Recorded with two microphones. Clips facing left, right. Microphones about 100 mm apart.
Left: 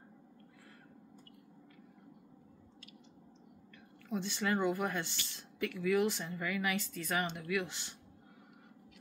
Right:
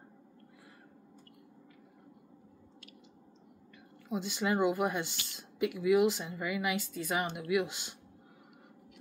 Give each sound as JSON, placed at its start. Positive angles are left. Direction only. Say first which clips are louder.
{"t": 4.1, "sound": "speech", "louder": "right 2 dB", "side_deg": -15}